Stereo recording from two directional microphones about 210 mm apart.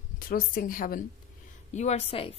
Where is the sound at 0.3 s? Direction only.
45° left (ahead or behind).